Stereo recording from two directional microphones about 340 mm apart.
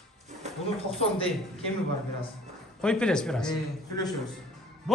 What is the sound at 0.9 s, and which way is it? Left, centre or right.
Speech, centre.